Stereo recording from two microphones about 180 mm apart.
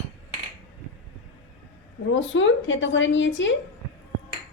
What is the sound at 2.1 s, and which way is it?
A woman's voice, 90° left.